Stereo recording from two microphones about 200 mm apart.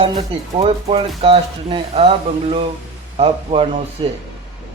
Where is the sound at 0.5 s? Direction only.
25° right (ahead or behind).